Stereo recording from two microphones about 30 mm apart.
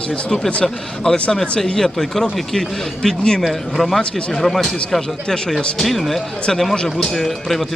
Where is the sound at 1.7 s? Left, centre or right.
Centre.